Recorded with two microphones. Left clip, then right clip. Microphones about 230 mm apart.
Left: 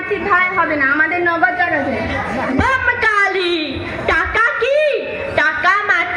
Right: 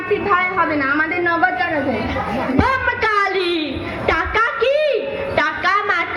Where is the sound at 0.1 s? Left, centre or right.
Right.